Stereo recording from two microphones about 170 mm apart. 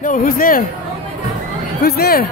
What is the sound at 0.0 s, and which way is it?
Speech, 55° left (ahead or behind).